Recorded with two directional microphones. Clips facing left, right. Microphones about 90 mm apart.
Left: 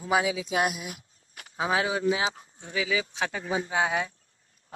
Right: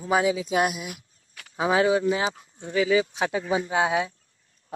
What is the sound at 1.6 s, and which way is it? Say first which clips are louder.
Speech: right 5 dB; centre (ahead or behind).